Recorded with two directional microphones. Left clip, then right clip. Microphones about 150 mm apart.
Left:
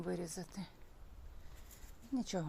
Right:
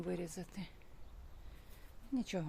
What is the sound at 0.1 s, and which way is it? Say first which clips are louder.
Speech: left 2 dB; 30° right (ahead or behind).